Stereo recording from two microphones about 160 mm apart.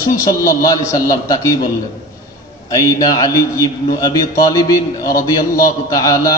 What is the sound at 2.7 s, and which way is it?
A man's voice, 20° left (ahead or behind).